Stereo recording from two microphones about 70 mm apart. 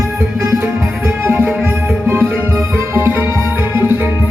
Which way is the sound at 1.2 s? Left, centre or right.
Right.